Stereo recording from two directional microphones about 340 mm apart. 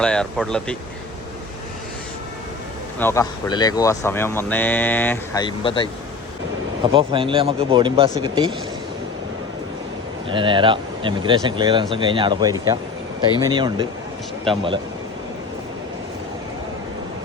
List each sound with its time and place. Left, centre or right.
0.0 s speech: centre
3.0 s speech: centre
6.9 s speech: centre
10.2 s speech: centre